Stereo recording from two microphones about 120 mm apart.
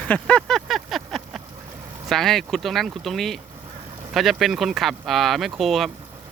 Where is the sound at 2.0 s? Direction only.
Centre (ahead or behind).